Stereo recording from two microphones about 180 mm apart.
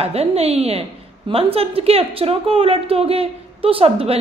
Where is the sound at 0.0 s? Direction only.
35° right (ahead or behind).